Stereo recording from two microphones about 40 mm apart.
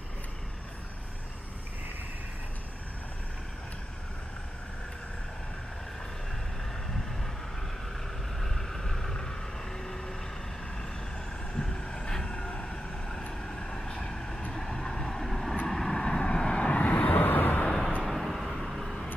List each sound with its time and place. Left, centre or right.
8.4 s vehicle: centre
11.5 s vehicle: centre; by 17.6 s left
17.6 s vehicle: centre